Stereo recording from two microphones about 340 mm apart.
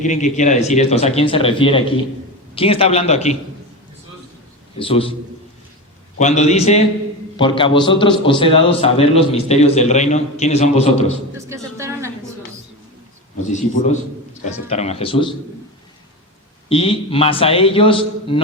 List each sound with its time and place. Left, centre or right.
0.0 s a man's voice: left
4.8 s a man's voice: centre
6.1 s a man's voice: centre
11.3 s a sound: centre
14.4 s a man's voice: centre
16.6 s a man's voice: centre